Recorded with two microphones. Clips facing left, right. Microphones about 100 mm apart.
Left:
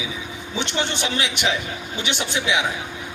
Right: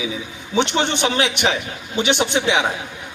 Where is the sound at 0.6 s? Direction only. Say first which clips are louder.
Right 6 dB; 60° right (ahead or behind).